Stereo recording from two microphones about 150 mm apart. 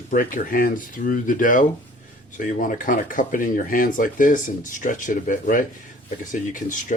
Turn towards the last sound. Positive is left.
turn(degrees=55)  # may be behind; listen again after turning